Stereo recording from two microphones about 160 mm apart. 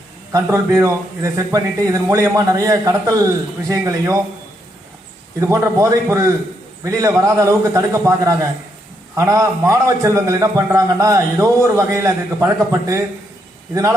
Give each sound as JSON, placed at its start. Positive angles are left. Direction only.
{"t": 0.3, "sound": "a man's voice", "side_deg": -20}
{"t": 5.4, "sound": "a man's voice", "side_deg": -20}